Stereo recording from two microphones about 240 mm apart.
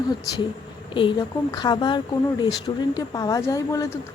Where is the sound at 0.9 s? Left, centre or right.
Centre.